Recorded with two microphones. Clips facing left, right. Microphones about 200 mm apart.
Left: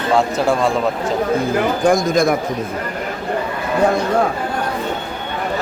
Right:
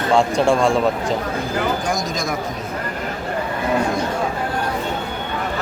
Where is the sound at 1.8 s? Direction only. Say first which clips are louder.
Left 9 dB; 55° left (ahead or behind).